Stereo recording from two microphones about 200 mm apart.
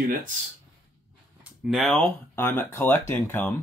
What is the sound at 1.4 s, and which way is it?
Speech, centre (ahead or behind).